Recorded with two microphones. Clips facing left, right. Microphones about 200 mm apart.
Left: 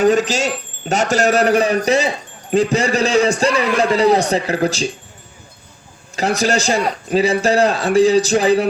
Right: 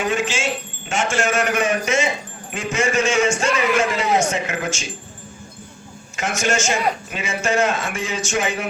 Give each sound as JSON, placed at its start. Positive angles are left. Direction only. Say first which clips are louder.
{"t": 0.0, "sound": "speech", "louder": "left 7 dB", "side_deg": 40}
{"t": 6.1, "sound": "speech", "louder": "left 5 dB", "side_deg": 35}